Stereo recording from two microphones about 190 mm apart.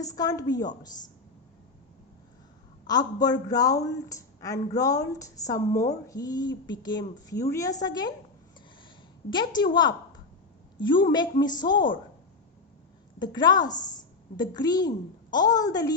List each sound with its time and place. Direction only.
0.0 s a woman's voice: 20° left (ahead or behind)
2.8 s a woman's voice: 20° left (ahead or behind)
9.3 s a woman's voice: 25° left (ahead or behind)
13.1 s a woman's voice: 20° left (ahead or behind)